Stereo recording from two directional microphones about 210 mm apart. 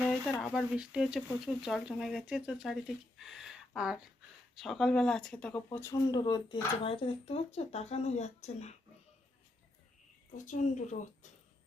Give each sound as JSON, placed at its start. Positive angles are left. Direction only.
{"t": 0.1, "sound": "speech", "side_deg": 0}
{"t": 3.2, "sound": "a sound", "side_deg": 0}
{"t": 4.5, "sound": "speech", "side_deg": 0}
{"t": 10.3, "sound": "speech", "side_deg": 35}